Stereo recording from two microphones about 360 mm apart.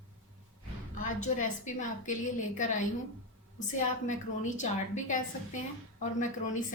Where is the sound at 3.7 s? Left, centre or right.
Centre.